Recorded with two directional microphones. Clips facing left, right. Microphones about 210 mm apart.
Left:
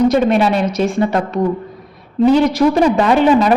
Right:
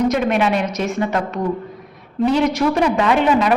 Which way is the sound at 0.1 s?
35° left (ahead or behind).